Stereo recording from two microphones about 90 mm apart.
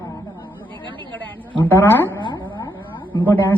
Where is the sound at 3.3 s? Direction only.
20° left (ahead or behind).